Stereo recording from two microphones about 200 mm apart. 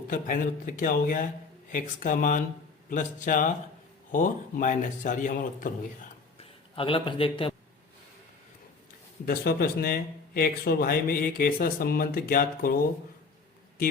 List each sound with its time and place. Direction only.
0.1 s speech: 45° left (ahead or behind)
6.3 s a sound: 25° left (ahead or behind)
9.2 s speech: 50° left (ahead or behind)